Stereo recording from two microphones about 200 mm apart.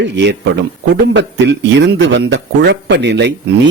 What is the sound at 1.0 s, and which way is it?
Speech, 60° right (ahead or behind).